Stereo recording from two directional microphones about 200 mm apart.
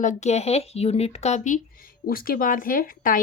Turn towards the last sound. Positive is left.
turn(degrees=45)  # may be behind; listen again after turning